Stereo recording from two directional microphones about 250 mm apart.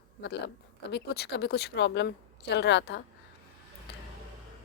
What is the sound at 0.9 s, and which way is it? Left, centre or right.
A woman's voice, left.